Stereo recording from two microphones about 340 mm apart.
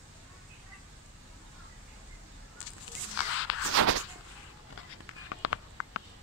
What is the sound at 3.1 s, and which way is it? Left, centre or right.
Walk, left.